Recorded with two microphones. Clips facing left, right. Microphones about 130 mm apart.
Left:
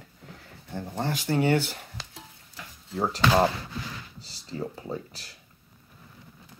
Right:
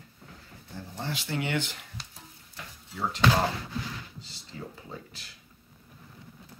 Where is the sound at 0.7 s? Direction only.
50° left (ahead or behind).